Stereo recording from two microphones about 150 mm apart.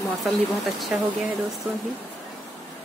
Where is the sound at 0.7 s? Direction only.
Centre (ahead or behind).